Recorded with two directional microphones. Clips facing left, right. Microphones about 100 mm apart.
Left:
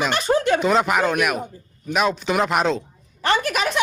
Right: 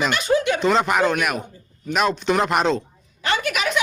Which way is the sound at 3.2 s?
35° left (ahead or behind).